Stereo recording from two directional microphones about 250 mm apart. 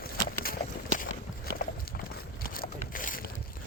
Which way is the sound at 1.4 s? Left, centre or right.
Left.